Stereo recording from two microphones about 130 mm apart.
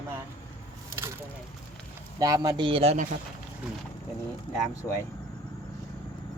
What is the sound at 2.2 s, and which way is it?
Speech, 30° right (ahead or behind).